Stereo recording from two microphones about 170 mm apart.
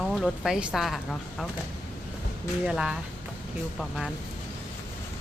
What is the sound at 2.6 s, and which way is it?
A woman's voice, 5° right (ahead or behind).